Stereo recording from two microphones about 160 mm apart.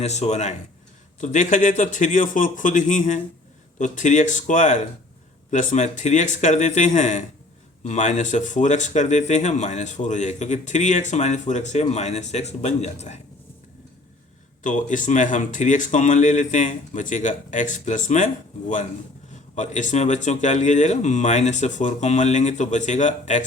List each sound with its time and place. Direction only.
0.0 s speech: 45° left (ahead or behind)
14.6 s speech: 50° left (ahead or behind)
19.3 s speech: 50° left (ahead or behind)